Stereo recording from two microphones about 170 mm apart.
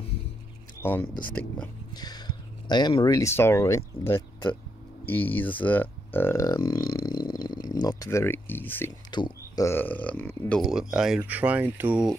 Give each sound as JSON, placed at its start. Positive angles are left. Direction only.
{"t": 0.7, "sound": "speech", "side_deg": 15}
{"t": 2.0, "sound": "speech", "side_deg": 25}
{"t": 9.1, "sound": "a sound", "side_deg": 25}
{"t": 9.7, "sound": "speech", "side_deg": 10}
{"t": 10.5, "sound": "speech", "side_deg": 0}